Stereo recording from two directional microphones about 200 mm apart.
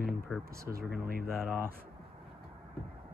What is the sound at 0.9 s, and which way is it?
Speech, 45° right (ahead or behind).